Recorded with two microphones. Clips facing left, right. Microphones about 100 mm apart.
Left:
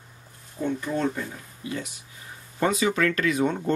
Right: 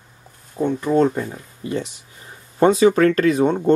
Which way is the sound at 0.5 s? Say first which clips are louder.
Right 9 dB; 45° right (ahead or behind).